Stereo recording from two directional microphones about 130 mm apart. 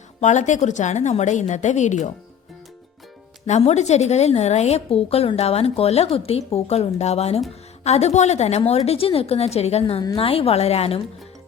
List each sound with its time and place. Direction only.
0.2 s a woman's voice: 65° left (ahead or behind)
3.4 s a woman's voice: 60° left (ahead or behind)